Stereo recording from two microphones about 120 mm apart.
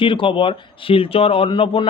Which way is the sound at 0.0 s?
45° left (ahead or behind).